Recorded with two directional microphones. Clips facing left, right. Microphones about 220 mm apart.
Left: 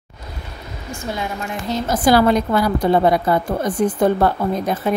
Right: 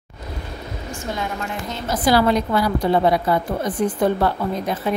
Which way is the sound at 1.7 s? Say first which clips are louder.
Left 4 dB; 50° left (ahead or behind).